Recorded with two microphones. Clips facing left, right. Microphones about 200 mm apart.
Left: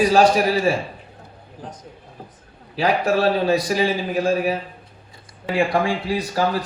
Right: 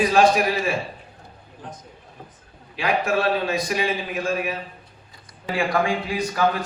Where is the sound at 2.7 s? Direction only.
35° left (ahead or behind).